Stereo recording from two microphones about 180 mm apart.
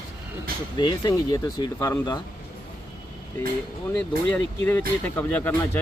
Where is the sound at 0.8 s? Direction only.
20° left (ahead or behind).